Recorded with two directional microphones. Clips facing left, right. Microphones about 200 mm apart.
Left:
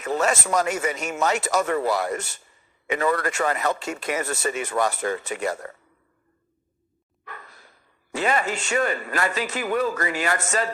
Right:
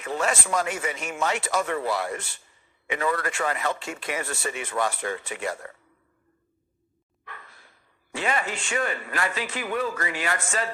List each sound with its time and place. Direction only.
0.0 s speech: 40° left (ahead or behind)
7.3 s speech: 40° left (ahead or behind)